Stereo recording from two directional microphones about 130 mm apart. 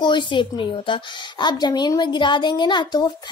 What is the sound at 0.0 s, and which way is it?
A woman's voice, 35° left (ahead or behind).